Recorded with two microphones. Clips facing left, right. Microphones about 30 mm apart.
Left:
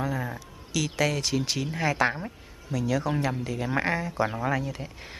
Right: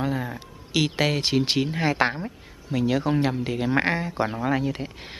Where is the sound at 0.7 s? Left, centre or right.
Right.